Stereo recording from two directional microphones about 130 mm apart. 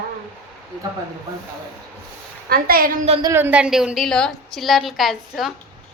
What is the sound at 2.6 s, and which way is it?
Speech, 90° right.